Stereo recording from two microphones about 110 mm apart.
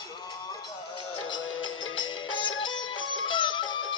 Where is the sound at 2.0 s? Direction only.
50° left (ahead or behind).